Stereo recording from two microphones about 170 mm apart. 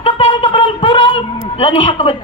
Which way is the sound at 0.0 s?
30° left (ahead or behind).